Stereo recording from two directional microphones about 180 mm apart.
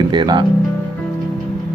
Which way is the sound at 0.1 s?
25° right (ahead or behind).